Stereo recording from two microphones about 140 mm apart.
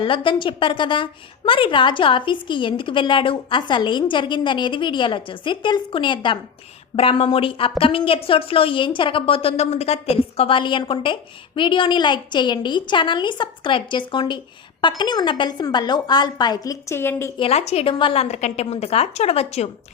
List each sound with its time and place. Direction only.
0.0 s a woman's voice: 35° left (ahead or behind)
16.9 s a woman's voice: 15° left (ahead or behind)
17.3 s a woman's voice: 45° left (ahead or behind)